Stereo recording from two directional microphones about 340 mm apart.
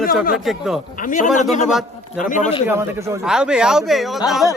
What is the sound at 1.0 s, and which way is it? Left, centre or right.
Speech, left.